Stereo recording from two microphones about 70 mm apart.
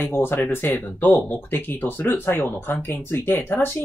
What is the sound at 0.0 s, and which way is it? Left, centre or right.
Speech, left.